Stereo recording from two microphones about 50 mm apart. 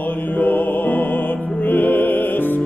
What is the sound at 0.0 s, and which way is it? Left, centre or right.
Music, left.